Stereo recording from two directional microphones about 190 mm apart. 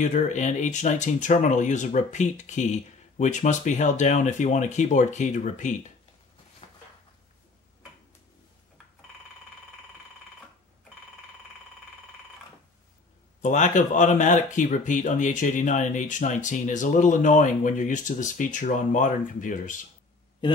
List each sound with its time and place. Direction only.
0.0 s speech: 40° left (ahead or behind)
6.6 s a sound: 35° left (ahead or behind)
13.4 s speech: 40° left (ahead or behind)
20.4 s speech: 25° left (ahead or behind)